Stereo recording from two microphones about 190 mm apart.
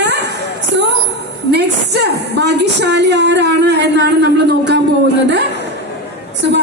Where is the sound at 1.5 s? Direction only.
60° right (ahead or behind).